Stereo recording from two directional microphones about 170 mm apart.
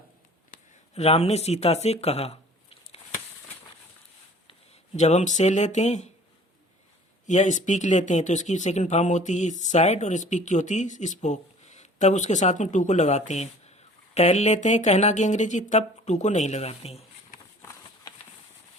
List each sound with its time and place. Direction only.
0.9 s speech: 40° left (ahead or behind)
4.9 s speech: 45° left (ahead or behind)
7.3 s speech: 45° left (ahead or behind)